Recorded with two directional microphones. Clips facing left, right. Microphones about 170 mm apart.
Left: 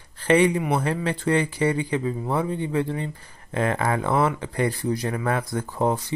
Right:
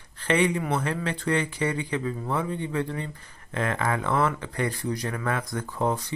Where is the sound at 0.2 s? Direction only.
30° left (ahead or behind).